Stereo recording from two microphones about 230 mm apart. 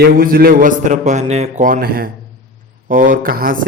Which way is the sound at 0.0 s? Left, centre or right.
Right.